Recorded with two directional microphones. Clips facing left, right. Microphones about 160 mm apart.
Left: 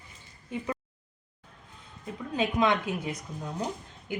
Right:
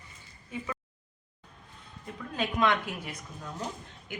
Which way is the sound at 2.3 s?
20° left (ahead or behind).